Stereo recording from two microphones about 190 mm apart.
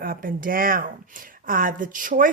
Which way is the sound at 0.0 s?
50° right (ahead or behind).